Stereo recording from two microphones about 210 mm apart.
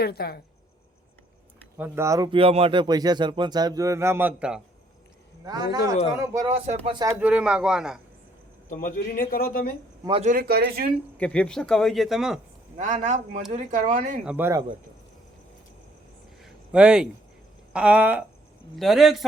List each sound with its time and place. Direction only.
0.0 s speech: 50° left (ahead or behind)
1.8 s speech: 15° right (ahead or behind)
5.5 s speech: 20° right (ahead or behind)
6.5 s speech: 30° right (ahead or behind)
7.2 s speech: 5° right (ahead or behind)
8.8 s speech: 40° left (ahead or behind)
10.0 s speech: 25° right (ahead or behind)
10.2 s speech: 45° right (ahead or behind)
11.2 s speech: 5° left (ahead or behind)
12.7 s a man's voice: 35° right (ahead or behind)
14.3 s speech: 10° right (ahead or behind)
16.4 s a sound: 5° right (ahead or behind)
17.7 s speech: 5° right (ahead or behind)